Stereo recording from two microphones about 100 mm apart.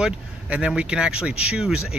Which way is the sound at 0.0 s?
10° right (ahead or behind).